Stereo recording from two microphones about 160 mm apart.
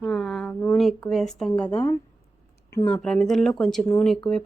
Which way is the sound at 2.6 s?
15° left (ahead or behind).